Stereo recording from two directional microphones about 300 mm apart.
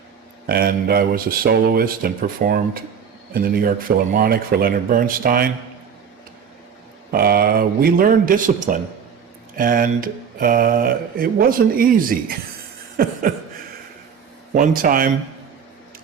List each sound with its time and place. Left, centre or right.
0.4 s speech: right
7.1 s speech: right
14.5 s speech: right